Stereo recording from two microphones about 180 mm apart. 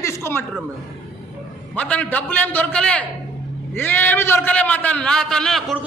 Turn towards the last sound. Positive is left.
turn(degrees=0)  # may be behind; listen again after turning